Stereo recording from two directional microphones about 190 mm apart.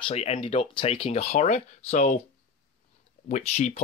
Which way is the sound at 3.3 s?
35° left (ahead or behind).